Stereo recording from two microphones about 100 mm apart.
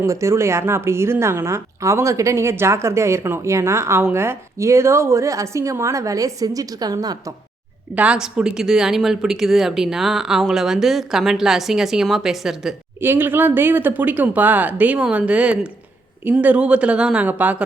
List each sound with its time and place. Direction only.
0.0 s a woman's voice: 30° right (ahead or behind)
7.9 s speech: 10° right (ahead or behind)
13.0 s speech: 20° right (ahead or behind)